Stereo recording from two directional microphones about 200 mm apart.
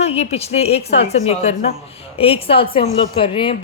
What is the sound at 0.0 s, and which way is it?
A woman's voice, 30° left (ahead or behind).